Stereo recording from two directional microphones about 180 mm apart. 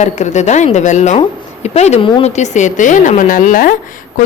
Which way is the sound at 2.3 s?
40° left (ahead or behind).